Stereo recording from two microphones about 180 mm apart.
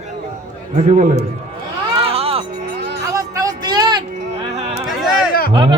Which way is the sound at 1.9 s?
35° right (ahead or behind).